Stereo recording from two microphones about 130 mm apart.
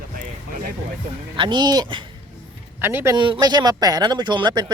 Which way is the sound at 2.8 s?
15° right (ahead or behind).